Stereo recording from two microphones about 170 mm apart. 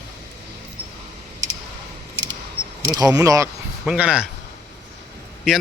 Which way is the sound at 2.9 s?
20° right (ahead or behind).